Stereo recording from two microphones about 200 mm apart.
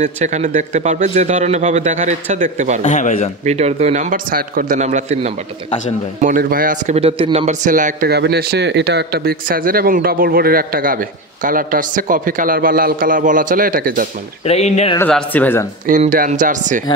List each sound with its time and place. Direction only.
0.0 s a man's voice: 35° right (ahead or behind)
2.8 s speech: 35° left (ahead or behind)
3.4 s a man's voice: 30° right (ahead or behind)
6.2 s a man's voice: 45° right (ahead or behind)
14.4 s speech: 30° left (ahead or behind)
15.0 s a man's voice: 5° left (ahead or behind)
15.9 s a man's voice: 40° right (ahead or behind)